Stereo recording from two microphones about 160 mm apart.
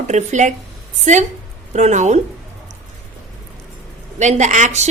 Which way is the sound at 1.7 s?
45° right (ahead or behind).